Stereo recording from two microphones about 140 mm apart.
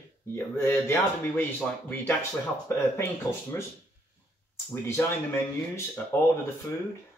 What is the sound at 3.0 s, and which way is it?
Speech, 20° left (ahead or behind).